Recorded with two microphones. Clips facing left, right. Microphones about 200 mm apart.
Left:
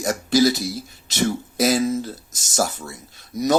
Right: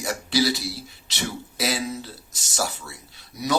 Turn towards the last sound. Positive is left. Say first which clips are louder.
# left 8 dB
turn(degrees=45)  # may be behind; listen again after turning